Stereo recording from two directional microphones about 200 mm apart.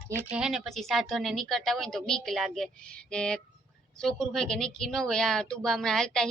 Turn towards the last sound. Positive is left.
turn(degrees=5)  # may be behind; listen again after turning